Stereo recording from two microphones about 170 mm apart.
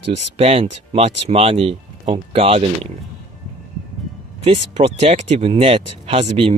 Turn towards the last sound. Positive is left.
turn(degrees=-30)  # may be behind; listen again after turning